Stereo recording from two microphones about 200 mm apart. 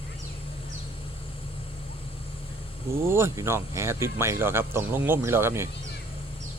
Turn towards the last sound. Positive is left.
turn(degrees=-10)  # may be behind; listen again after turning